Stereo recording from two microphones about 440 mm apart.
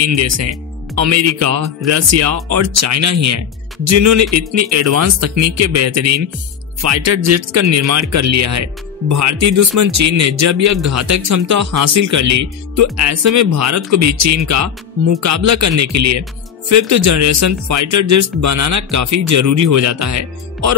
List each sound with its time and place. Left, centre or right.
0.0 s speech: right